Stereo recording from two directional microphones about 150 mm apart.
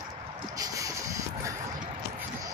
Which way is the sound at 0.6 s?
20° right (ahead or behind).